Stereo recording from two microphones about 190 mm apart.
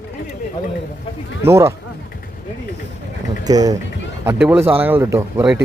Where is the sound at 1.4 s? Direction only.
15° right (ahead or behind).